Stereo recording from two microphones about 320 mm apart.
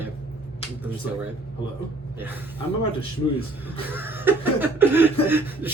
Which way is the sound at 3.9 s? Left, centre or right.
Centre.